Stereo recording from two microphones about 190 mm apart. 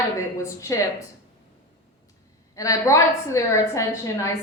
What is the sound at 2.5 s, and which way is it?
Speech, 15° left (ahead or behind).